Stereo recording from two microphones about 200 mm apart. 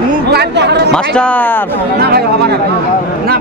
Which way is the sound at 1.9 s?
55° right (ahead or behind).